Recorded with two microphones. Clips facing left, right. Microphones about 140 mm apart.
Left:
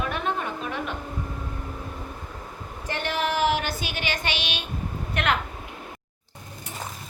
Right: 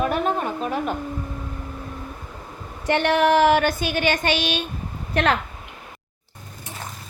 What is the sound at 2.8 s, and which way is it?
A woman's voice, 70° right (ahead or behind).